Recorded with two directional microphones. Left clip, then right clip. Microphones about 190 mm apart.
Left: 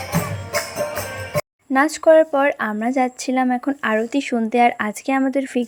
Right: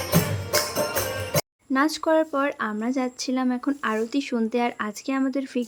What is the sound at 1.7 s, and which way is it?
Speech, 20° left (ahead or behind).